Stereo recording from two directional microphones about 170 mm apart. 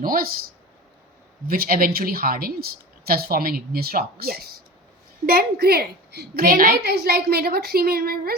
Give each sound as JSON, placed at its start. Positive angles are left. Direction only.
{"t": 0.0, "sound": "a woman's voice", "side_deg": -55}
{"t": 1.5, "sound": "a woman's voice", "side_deg": -60}